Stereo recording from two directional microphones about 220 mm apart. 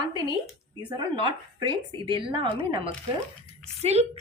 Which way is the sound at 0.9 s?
20° right (ahead or behind).